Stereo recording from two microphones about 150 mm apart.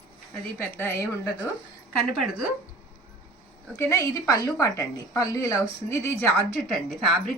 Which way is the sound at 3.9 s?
20° left (ahead or behind).